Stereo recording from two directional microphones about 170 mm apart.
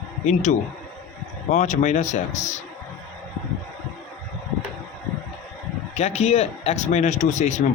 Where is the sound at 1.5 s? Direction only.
45° left (ahead or behind).